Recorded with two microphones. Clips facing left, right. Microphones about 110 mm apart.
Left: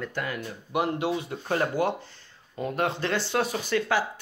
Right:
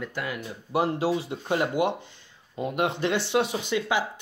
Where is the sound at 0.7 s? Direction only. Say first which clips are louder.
Right 2 dB; 30° right (ahead or behind).